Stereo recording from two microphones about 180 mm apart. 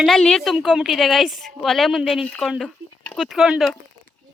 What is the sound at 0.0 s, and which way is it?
A woman's voice, 5° left (ahead or behind).